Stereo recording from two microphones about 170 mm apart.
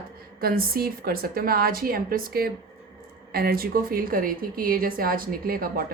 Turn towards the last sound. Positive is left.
turn(degrees=-60)  # may be behind; listen again after turning